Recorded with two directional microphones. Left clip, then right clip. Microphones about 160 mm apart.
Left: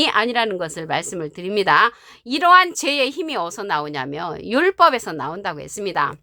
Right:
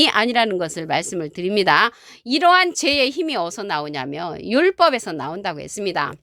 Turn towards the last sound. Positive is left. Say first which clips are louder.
# left 1 dB
turn(degrees=-35)  # may be behind; listen again after turning